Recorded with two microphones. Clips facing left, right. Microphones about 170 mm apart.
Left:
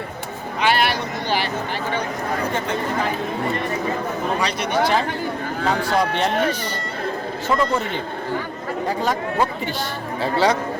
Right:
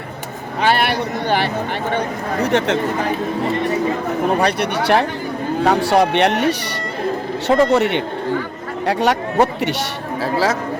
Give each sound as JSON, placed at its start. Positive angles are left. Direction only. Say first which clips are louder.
{"t": 0.6, "sound": "speech", "louder": "right 3 dB", "side_deg": -55}
{"t": 1.9, "sound": "speech", "louder": "right 1 dB", "side_deg": -70}
{"t": 4.4, "sound": "speech", "louder": "right 3 dB", "side_deg": -60}
{"t": 10.2, "sound": "speech", "louder": "even", "side_deg": 0}